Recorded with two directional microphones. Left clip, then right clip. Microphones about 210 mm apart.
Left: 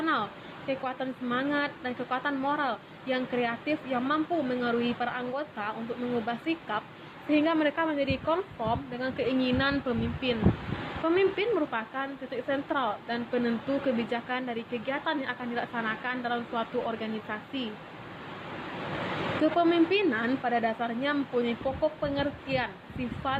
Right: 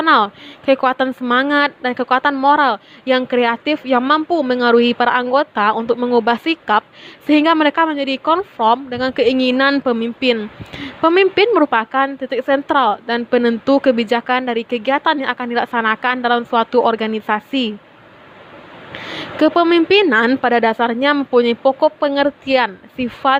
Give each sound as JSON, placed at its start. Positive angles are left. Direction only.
{"t": 0.0, "sound": "a woman's voice", "side_deg": -50}
{"t": 19.4, "sound": "a woman's voice", "side_deg": -50}